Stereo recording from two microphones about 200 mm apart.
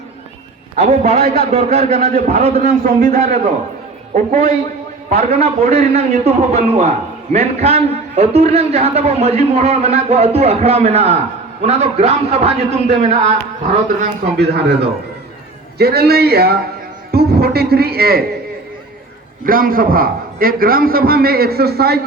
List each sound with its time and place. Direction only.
0.8 s a man's voice: 35° right (ahead or behind)
14.3 s a man's voice: 55° right (ahead or behind)
19.5 s a man's voice: 45° right (ahead or behind)